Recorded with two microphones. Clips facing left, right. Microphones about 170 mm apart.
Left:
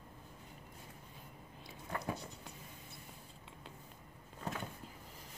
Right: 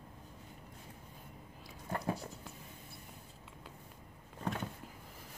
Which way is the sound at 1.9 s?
45° right (ahead or behind).